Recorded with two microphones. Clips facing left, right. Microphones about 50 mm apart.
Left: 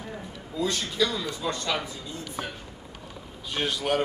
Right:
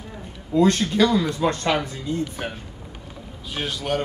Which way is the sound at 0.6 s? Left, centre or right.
Right.